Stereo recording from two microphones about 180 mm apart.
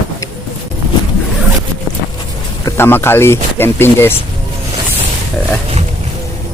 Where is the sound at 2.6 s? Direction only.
15° left (ahead or behind).